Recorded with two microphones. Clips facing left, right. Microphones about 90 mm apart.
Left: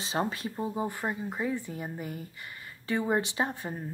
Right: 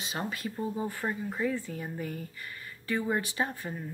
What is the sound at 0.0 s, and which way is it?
Speech, 30° left (ahead or behind).